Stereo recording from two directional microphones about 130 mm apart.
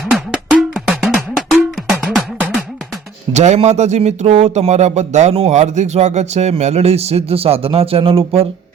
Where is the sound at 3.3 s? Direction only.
60° right (ahead or behind).